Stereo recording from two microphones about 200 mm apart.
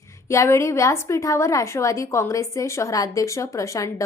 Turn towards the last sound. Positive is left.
turn(degrees=15)  # may be behind; listen again after turning